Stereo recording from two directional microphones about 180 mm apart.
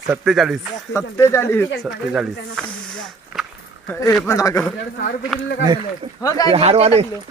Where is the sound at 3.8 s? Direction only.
10° left (ahead or behind).